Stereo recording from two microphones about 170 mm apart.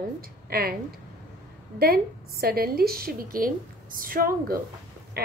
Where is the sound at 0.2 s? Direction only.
65° right (ahead or behind).